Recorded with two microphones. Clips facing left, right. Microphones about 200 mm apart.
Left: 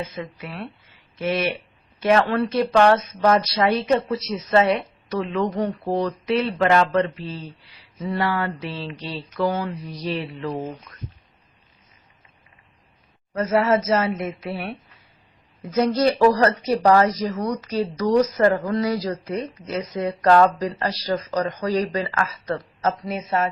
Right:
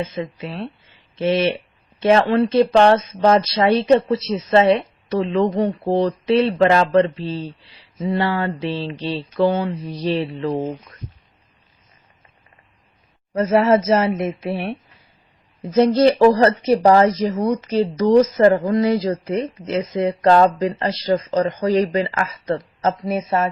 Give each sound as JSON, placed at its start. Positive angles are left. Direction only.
{"t": 0.0, "sound": "speech", "side_deg": -25}
{"t": 13.3, "sound": "speech", "side_deg": -25}
{"t": 15.7, "sound": "speech", "side_deg": -30}